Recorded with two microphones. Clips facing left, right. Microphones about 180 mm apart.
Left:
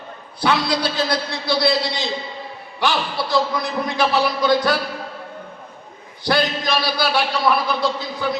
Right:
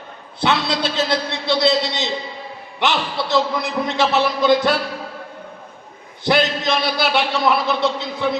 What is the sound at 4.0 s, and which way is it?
Speech, 25° right (ahead or behind).